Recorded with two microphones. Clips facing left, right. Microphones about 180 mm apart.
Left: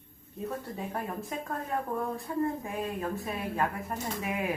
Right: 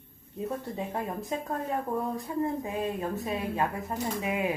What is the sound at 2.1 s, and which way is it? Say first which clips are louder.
A woman's voice: right 1 dB; 20° right (ahead or behind).